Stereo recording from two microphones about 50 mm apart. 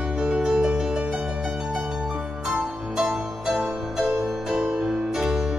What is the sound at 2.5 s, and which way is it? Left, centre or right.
Music, centre.